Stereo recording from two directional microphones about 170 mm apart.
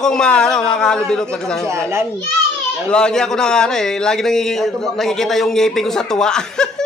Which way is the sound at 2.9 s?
5° left (ahead or behind).